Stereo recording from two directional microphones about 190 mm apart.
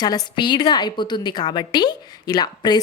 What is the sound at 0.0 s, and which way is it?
A woman's voice, 20° left (ahead or behind).